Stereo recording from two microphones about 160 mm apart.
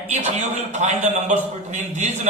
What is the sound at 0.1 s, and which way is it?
A man's voice, 45° right (ahead or behind).